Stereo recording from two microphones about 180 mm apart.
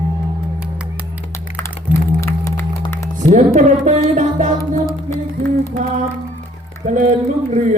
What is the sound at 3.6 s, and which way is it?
Speech, 40° right (ahead or behind).